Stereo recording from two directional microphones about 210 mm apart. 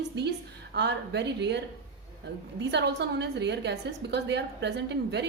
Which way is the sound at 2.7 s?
55° right (ahead or behind).